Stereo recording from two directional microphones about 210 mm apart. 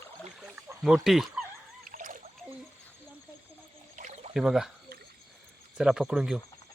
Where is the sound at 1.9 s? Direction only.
40° right (ahead or behind).